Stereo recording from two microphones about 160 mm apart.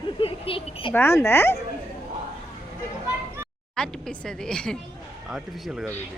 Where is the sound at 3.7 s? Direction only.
5° left (ahead or behind).